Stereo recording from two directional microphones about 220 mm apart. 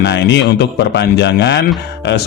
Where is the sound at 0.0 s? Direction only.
50° left (ahead or behind).